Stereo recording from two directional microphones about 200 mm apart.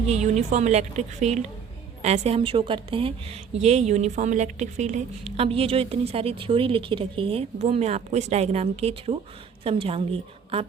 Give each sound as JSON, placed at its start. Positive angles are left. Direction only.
{"t": 0.1, "sound": "a woman's voice", "side_deg": -35}